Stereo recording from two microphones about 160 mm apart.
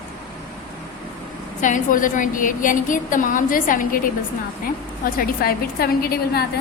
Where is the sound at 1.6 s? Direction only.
55° left (ahead or behind).